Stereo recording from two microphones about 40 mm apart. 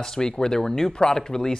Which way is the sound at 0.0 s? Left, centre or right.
Centre.